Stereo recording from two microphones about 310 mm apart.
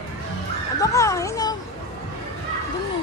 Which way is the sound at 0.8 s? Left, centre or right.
Centre.